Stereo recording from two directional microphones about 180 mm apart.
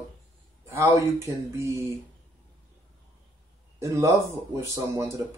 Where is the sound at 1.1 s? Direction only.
15° right (ahead or behind).